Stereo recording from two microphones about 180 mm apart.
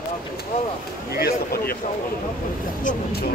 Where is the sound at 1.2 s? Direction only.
60° left (ahead or behind).